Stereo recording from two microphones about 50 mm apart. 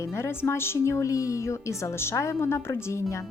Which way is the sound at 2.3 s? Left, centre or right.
Left.